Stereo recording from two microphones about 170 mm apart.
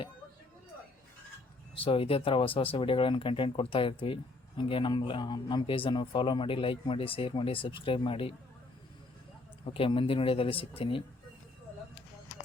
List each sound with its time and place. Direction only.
1.7 s speech: 30° left (ahead or behind)
9.6 s speech: 30° left (ahead or behind)